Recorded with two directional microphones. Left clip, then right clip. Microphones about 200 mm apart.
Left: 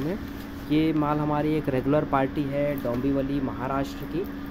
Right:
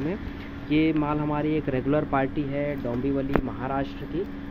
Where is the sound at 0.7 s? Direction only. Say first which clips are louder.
Even; 15° left (ahead or behind).